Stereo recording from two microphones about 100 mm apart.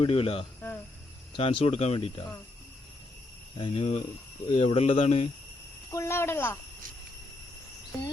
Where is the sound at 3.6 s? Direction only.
75° left (ahead or behind).